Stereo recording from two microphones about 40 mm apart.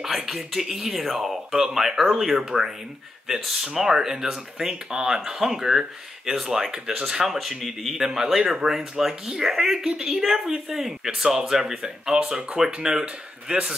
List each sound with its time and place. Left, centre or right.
0.0 s speech: centre
13.0 s speech: right